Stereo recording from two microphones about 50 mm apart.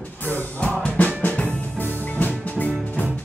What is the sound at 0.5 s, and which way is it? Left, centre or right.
Music, left.